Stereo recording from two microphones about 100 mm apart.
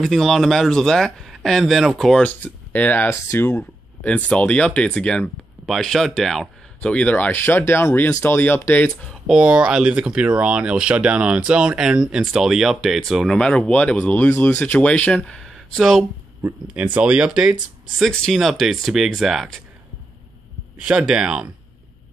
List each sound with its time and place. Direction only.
0.0 s speech: centre (ahead or behind)
2.2 s speech: 15° left (ahead or behind)
9.3 s speech: 5° right (ahead or behind)
13.3 s speech: 10° left (ahead or behind)
16.7 s speech: 15° right (ahead or behind)
20.8 s speech: 10° right (ahead or behind)